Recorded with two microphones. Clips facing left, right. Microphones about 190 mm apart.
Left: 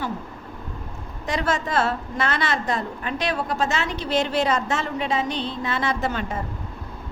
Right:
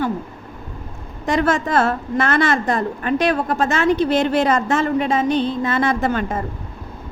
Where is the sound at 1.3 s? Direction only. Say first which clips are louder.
Right 6 dB; 50° right (ahead or behind).